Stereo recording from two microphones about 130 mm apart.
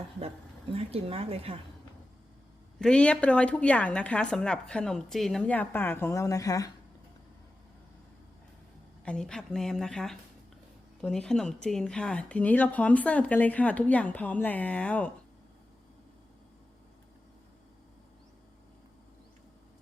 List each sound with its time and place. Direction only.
0.7 s speech: 50° right (ahead or behind)
2.7 s speech: 5° left (ahead or behind); by 6.7 s 25° left (ahead or behind)
9.0 s speech: 5° left (ahead or behind)